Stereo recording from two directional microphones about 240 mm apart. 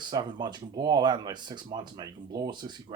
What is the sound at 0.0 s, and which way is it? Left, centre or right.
Speech, centre.